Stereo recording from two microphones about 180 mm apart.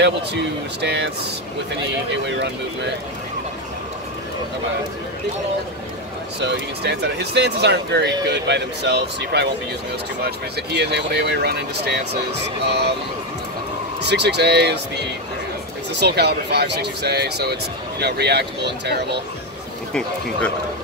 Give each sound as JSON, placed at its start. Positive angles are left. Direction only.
{"t": 0.0, "sound": "speech", "side_deg": -70}
{"t": 2.2, "sound": "speech", "side_deg": -75}
{"t": 6.4, "sound": "speech", "side_deg": -70}
{"t": 14.0, "sound": "speech", "side_deg": -70}
{"t": 16.0, "sound": "speech", "side_deg": -65}